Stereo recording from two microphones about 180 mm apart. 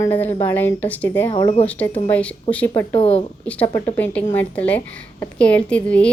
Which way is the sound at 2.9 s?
30° left (ahead or behind).